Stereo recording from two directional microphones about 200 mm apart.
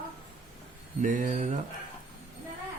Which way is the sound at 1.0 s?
40° right (ahead or behind).